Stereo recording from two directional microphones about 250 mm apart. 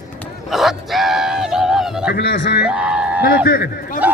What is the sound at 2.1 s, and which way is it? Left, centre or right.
Speech, left.